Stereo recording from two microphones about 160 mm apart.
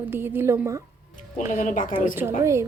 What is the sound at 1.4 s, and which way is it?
Speech, 50° left (ahead or behind).